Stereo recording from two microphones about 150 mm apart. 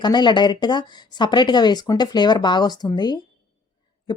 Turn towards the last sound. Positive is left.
turn(degrees=25)  # may be behind; listen again after turning